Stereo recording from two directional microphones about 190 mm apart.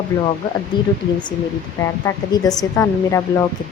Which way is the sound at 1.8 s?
15° left (ahead or behind).